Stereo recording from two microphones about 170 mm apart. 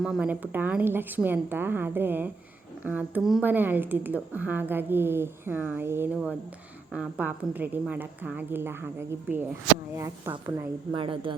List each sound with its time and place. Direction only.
0.0 s speech: 5° right (ahead or behind)
10.9 s speech: 30° right (ahead or behind)